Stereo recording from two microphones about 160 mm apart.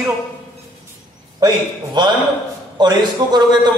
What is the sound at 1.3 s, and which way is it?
Speech, 25° right (ahead or behind).